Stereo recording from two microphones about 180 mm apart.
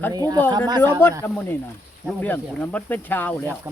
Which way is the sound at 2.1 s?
10° left (ahead or behind).